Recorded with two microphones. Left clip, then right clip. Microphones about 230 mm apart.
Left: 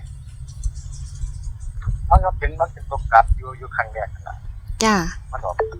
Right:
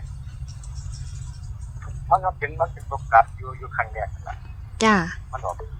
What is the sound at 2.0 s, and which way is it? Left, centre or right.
A woman's voice, left.